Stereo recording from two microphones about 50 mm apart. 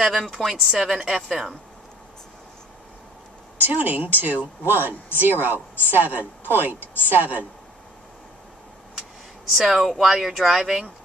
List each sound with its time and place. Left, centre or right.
0.0 s speech: centre
3.5 s speech: right
9.5 s speech: centre